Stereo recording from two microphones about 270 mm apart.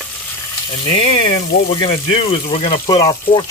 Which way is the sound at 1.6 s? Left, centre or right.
Centre.